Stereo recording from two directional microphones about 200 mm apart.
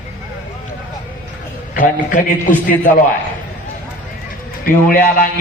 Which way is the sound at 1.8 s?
40° left (ahead or behind).